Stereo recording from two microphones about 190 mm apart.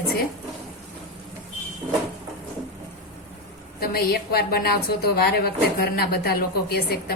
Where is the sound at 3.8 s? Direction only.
55° left (ahead or behind).